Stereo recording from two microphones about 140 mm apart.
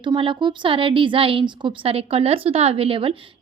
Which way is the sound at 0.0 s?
35° right (ahead or behind).